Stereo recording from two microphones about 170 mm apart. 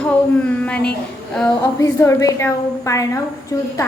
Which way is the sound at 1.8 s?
20° left (ahead or behind).